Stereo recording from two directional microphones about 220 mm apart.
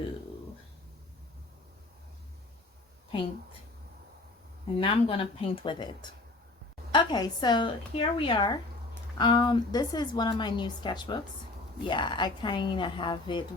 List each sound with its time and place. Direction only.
4.8 s a woman's voice: 25° left (ahead or behind)